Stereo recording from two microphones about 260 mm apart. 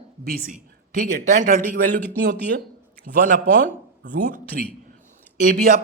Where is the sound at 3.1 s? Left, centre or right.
Right.